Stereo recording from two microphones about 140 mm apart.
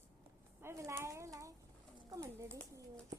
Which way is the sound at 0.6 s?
20° right (ahead or behind).